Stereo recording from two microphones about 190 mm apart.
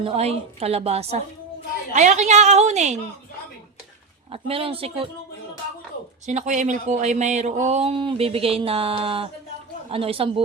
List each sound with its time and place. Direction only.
0.0 s speech: 30° right (ahead or behind)
4.3 s speech: 30° right (ahead or behind)
6.2 s speech: 40° right (ahead or behind)